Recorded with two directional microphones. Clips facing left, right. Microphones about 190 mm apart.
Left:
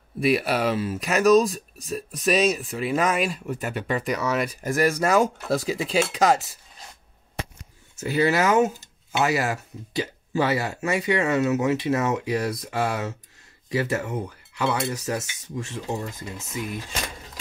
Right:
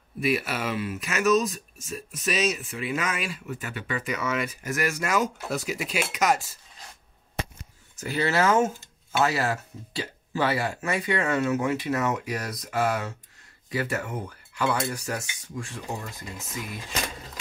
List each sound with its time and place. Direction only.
0.2 s speech: 35° left (ahead or behind)
8.0 s speech: 20° left (ahead or behind)